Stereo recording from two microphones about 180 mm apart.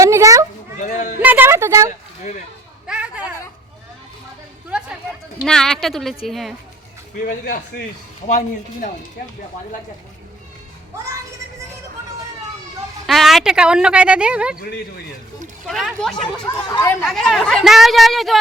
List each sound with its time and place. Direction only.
0.0 s children playing: 20° right (ahead or behind)
0.8 s a man's voice: 40° left (ahead or behind)
1.2 s a woman's voice: 10° right (ahead or behind)
2.8 s a sound: 5° right (ahead or behind)
5.4 s speech: centre (ahead or behind)
7.3 s a man's voice: 55° left (ahead or behind)
8.3 s speech: 40° left (ahead or behind)
13.1 s speech: centre (ahead or behind)
15.6 s speech: centre (ahead or behind)
17.1 s speech: centre (ahead or behind)